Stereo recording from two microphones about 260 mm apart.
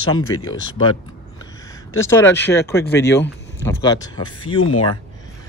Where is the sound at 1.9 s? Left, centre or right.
Centre.